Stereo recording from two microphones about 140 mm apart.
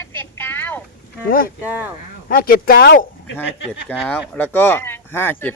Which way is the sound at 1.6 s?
10° right (ahead or behind).